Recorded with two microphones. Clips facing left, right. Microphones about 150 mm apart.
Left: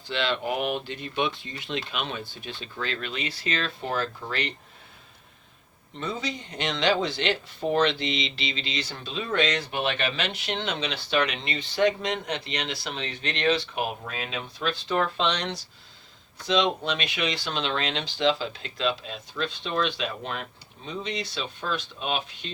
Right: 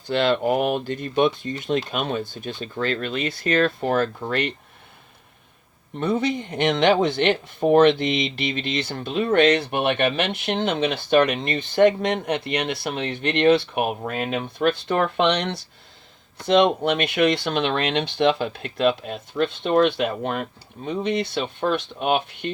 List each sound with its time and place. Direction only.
0.1 s speech: 50° right (ahead or behind)
6.0 s speech: 55° right (ahead or behind)